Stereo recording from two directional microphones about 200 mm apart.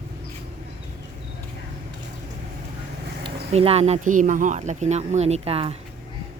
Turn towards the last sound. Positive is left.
turn(degrees=-30)  # may be behind; listen again after turning